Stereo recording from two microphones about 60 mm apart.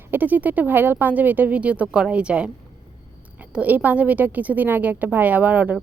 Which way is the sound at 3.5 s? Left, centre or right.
Right.